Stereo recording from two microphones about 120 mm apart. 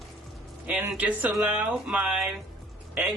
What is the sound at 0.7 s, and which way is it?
Speech, 5° right (ahead or behind).